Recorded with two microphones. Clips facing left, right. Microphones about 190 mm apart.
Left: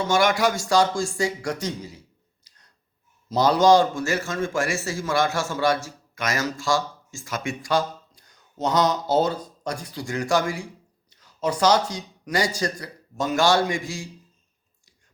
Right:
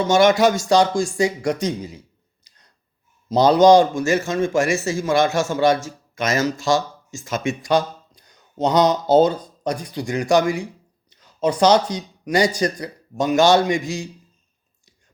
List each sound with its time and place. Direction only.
0.1 s a man's voice: 25° right (ahead or behind)
3.2 s a man's voice: 20° right (ahead or behind)